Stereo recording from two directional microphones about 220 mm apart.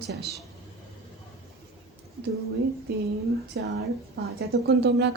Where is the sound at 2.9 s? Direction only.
45° right (ahead or behind).